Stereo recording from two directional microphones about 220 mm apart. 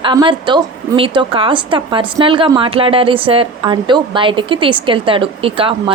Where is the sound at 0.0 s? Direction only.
20° right (ahead or behind).